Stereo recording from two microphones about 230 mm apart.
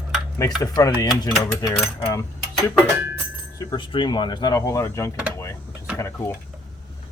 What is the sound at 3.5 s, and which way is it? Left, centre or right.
Speech, centre.